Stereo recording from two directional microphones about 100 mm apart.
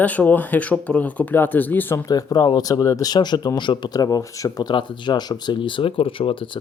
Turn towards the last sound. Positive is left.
turn(degrees=65)  # may be behind; listen again after turning